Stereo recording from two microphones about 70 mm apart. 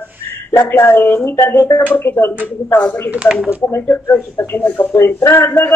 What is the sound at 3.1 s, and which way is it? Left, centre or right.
Speech, centre.